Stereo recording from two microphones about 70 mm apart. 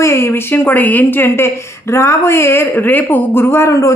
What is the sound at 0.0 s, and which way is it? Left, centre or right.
Speech, left.